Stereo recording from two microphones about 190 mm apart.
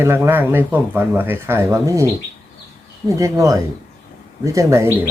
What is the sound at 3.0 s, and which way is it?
Speech, 15° right (ahead or behind).